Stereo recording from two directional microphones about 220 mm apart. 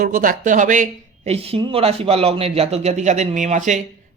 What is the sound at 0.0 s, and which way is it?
Speech, 40° right (ahead or behind).